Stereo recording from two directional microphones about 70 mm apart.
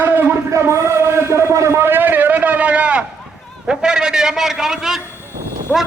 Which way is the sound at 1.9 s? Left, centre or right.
Right.